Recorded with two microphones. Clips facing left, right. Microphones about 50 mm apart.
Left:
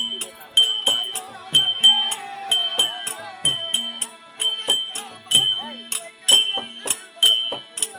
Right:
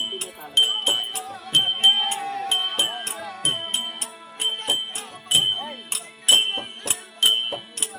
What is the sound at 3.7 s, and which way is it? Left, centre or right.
Music, centre.